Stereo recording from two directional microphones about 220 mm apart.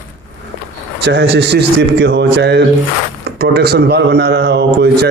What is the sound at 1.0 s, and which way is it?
A man's voice, 50° right (ahead or behind).